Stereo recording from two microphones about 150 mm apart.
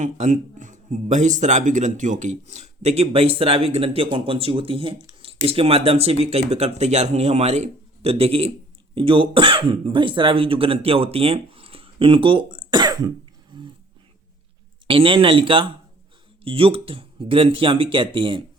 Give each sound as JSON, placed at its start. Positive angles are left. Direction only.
{"t": 0.0, "sound": "speech", "side_deg": -55}
{"t": 14.8, "sound": "speech", "side_deg": -35}